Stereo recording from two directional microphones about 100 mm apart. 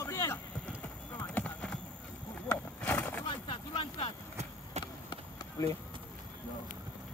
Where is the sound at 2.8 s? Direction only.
20° left (ahead or behind).